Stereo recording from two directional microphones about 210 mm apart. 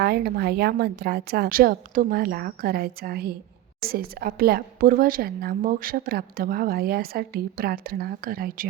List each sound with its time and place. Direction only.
0.0 s a woman's voice: 50° right (ahead or behind)